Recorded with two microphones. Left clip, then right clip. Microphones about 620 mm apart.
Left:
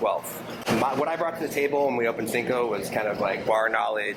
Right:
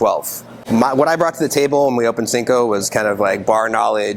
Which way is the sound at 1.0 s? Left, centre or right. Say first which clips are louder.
Right 11 dB; right.